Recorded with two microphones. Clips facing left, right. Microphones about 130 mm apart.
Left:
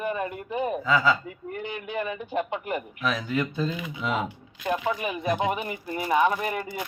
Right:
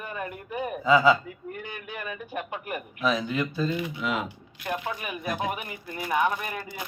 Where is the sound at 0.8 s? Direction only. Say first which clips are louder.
Right 5 dB; 15° right (ahead or behind).